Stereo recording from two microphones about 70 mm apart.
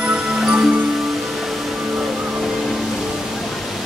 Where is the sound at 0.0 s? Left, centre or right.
Centre.